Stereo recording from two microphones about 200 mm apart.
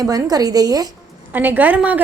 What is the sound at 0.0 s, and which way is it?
A woman's voice, 20° right (ahead or behind).